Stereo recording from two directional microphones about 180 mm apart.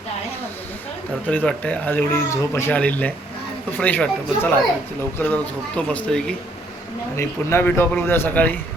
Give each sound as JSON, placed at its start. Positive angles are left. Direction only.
{"t": 1.3, "sound": "speech", "side_deg": 10}